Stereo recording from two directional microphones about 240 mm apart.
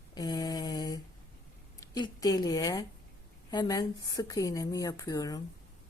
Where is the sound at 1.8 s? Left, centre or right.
Centre.